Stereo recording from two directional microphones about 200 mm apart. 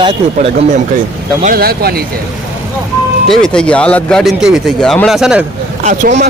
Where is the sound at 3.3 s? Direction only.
5° left (ahead or behind).